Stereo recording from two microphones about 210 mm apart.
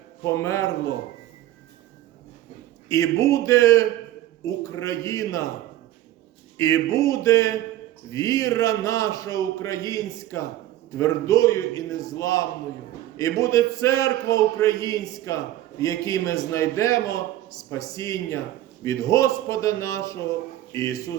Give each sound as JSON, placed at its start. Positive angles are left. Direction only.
{"t": 0.3, "sound": "a man's voice", "side_deg": 15}
{"t": 2.9, "sound": "a man's voice", "side_deg": 15}
{"t": 6.6, "sound": "a man's voice", "side_deg": 15}